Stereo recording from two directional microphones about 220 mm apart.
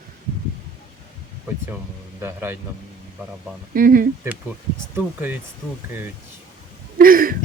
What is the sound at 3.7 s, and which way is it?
Speech, 40° right (ahead or behind).